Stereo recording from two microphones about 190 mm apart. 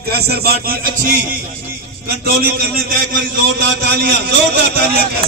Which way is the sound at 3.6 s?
55° right (ahead or behind).